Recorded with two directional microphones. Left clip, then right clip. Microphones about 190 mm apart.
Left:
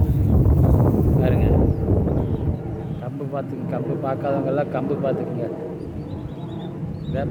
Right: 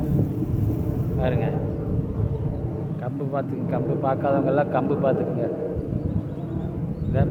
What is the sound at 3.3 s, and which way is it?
Speech, 10° left (ahead or behind).